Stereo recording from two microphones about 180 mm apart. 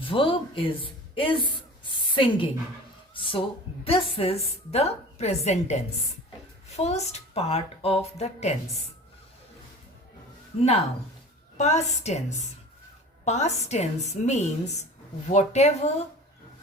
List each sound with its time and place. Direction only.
0.0 s a woman's voice: 30° left (ahead or behind)
10.5 s a woman's voice: 35° left (ahead or behind)